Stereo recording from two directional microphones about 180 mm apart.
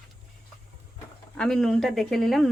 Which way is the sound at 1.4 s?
5° left (ahead or behind).